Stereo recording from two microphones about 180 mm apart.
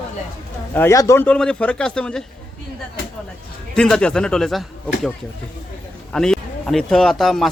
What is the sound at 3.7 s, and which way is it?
Speech, 5° left (ahead or behind).